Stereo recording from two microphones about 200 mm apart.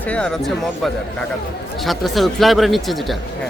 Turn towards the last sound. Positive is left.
turn(degrees=0)  # may be behind; listen again after turning